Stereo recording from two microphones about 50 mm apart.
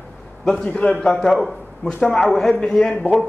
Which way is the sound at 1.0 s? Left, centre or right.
Centre.